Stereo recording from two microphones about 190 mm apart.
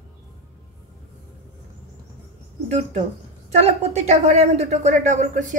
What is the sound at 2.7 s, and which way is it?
A woman's voice, 35° right (ahead or behind).